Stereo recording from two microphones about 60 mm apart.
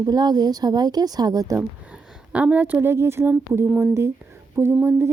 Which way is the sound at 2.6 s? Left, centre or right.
Right.